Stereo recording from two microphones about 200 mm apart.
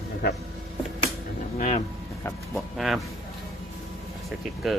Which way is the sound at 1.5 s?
35° left (ahead or behind).